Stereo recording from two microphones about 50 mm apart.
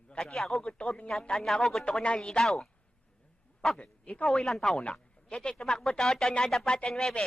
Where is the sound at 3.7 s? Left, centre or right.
Left.